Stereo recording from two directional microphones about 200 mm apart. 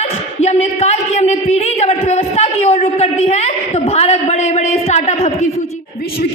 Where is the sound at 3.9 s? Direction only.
30° left (ahead or behind).